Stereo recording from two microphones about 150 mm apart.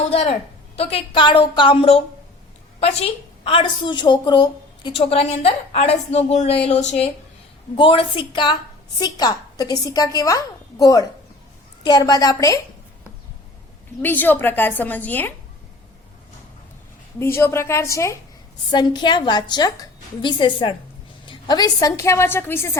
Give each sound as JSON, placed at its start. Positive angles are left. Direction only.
{"t": 0.0, "sound": "a woman's voice", "side_deg": 45}
{"t": 7.8, "sound": "a woman's voice", "side_deg": 35}
{"t": 14.0, "sound": "a woman's voice", "side_deg": 10}
{"t": 17.2, "sound": "a woman's voice", "side_deg": 15}
{"t": 18.7, "sound": "a woman's voice", "side_deg": 30}